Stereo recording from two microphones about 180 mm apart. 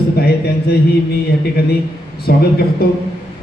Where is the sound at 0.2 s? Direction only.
60° left (ahead or behind).